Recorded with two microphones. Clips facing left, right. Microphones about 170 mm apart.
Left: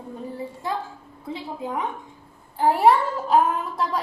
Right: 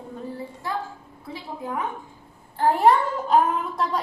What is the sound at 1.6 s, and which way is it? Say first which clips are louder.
A woman's voice: right 1 dB; 20° left (ahead or behind).